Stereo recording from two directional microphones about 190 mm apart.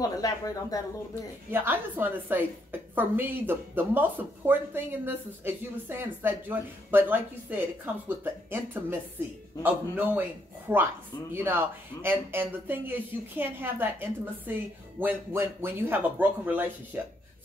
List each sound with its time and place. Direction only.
0.0 s a woman's voice: 20° left (ahead or behind)
1.5 s a woman's voice: 10° right (ahead or behind)
12.0 s a woman's voice: 10° right (ahead or behind)